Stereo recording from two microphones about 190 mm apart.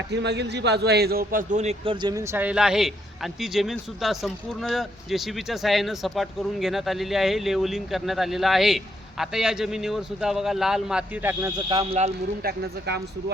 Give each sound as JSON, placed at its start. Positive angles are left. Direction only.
{"t": 0.1, "sound": "a man's voice", "side_deg": -65}
{"t": 11.7, "sound": "speech", "side_deg": -30}
{"t": 12.5, "sound": "speech", "side_deg": -60}